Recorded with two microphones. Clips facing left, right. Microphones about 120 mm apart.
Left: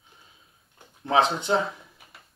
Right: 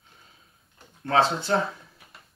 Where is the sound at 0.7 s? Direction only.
15° left (ahead or behind).